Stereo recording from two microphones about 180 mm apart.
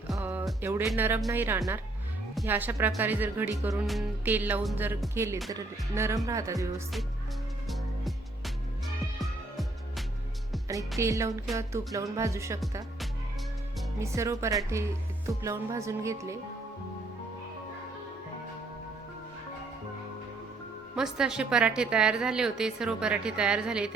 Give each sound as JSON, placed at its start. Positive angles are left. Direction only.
{"t": 0.1, "sound": "music", "side_deg": -10}
{"t": 7.7, "sound": "music", "side_deg": 0}
{"t": 10.7, "sound": "music", "side_deg": -15}
{"t": 14.0, "sound": "music", "side_deg": -15}
{"t": 20.9, "sound": "a woman's voice", "side_deg": -5}